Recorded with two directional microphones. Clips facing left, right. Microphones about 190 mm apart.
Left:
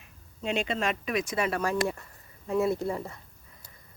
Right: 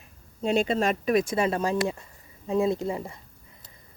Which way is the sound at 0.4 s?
35° right (ahead or behind).